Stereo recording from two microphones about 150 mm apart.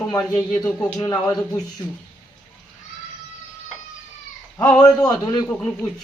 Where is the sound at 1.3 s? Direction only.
25° left (ahead or behind).